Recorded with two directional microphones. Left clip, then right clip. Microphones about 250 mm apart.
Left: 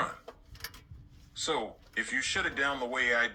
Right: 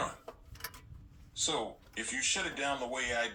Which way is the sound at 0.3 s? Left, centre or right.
Centre.